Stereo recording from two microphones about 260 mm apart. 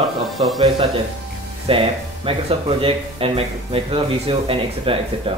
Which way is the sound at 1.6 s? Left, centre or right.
Right.